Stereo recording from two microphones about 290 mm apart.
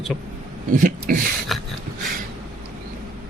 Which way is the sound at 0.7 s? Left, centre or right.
Right.